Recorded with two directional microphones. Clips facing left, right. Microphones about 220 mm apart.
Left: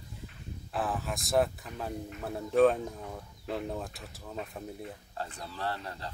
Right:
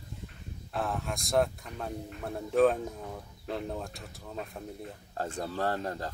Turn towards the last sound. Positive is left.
turn(degrees=-45)  # may be behind; listen again after turning